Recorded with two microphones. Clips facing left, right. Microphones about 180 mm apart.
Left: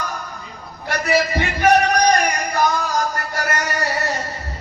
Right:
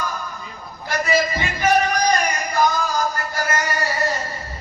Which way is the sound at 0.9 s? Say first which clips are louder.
Left 1 dB; 65° left (ahead or behind).